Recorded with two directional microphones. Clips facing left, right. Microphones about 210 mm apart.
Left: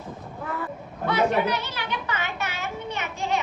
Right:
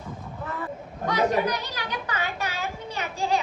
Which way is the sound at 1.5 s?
40° right (ahead or behind).